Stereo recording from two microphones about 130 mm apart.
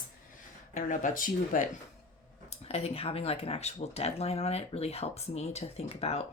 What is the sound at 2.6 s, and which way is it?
Speech, 50° left (ahead or behind).